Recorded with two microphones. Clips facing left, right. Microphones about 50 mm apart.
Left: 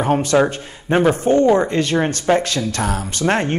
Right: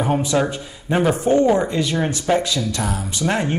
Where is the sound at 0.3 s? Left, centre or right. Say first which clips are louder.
Left 4 dB; left.